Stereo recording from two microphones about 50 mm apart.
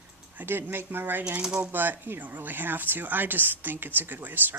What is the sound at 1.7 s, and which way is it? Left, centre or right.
Speech, right.